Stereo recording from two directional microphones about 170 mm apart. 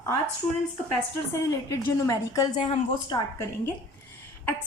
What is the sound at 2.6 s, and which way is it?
Speech, 35° left (ahead or behind).